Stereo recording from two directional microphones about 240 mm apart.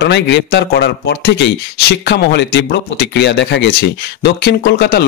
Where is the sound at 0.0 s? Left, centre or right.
Left.